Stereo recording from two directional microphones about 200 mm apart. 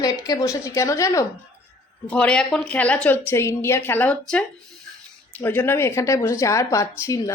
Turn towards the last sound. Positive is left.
turn(degrees=15)  # may be behind; listen again after turning